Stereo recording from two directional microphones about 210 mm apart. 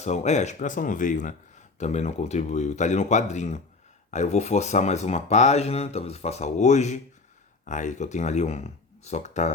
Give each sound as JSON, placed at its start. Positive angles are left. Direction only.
{"t": 0.0, "sound": "speech", "side_deg": 35}